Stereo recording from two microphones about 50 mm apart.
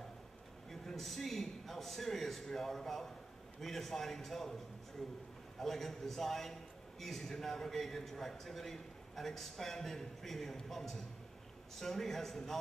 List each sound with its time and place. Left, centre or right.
0.7 s a man's voice: centre
5.6 s a man's voice: centre